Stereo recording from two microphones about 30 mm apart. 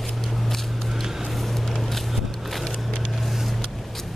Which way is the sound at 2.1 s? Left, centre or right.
Centre.